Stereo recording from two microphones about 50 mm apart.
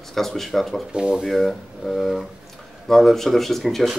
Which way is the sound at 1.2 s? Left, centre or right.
Centre.